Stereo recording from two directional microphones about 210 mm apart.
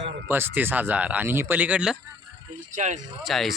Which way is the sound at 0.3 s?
10° right (ahead or behind).